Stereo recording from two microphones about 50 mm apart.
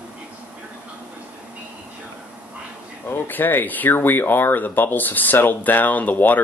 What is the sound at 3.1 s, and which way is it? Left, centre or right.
Speech, left.